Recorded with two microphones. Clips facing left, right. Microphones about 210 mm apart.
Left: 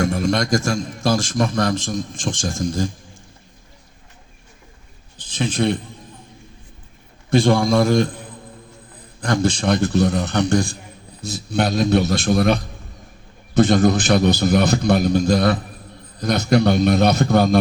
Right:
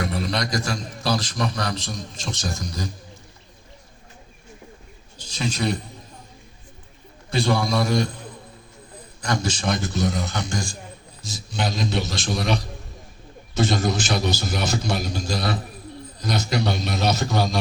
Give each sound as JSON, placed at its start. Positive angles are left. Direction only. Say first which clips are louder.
{"t": 0.0, "sound": "a man's voice", "louder": "left 6 dB", "side_deg": 50}
{"t": 5.4, "sound": "a man's voice", "louder": "left 5 dB", "side_deg": 50}
{"t": 7.3, "sound": "a man's voice", "louder": "left 7 dB", "side_deg": 50}
{"t": 9.2, "sound": "a man's voice", "louder": "left 6 dB", "side_deg": 55}